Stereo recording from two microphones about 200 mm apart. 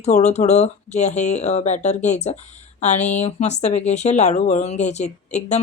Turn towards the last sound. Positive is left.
turn(degrees=35)  # may be behind; listen again after turning